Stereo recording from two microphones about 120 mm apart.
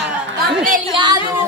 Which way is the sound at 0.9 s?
40° right (ahead or behind).